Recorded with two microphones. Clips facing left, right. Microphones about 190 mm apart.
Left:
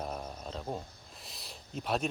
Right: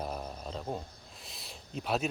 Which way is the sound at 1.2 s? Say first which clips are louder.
Right 1 dB; centre (ahead or behind).